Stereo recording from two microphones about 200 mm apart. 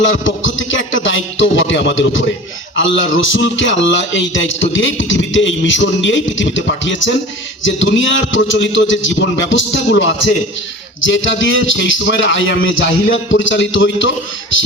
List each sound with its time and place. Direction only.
0.0 s a man's voice: 70° left (ahead or behind)